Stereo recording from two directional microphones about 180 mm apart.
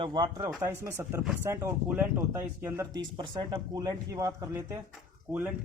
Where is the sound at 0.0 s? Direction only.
25° right (ahead or behind).